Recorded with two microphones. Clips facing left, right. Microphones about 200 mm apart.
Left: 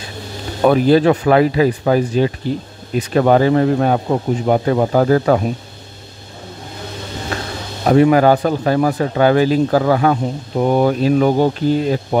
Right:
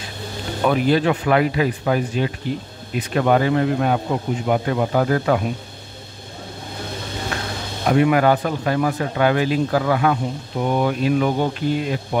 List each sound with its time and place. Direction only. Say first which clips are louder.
0.6 s speech: left 6 dB; 40° left (ahead or behind)
7.8 s speech: left 5 dB; 35° left (ahead or behind)